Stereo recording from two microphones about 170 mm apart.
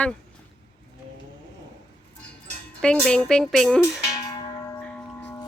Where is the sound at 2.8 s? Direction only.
5° left (ahead or behind).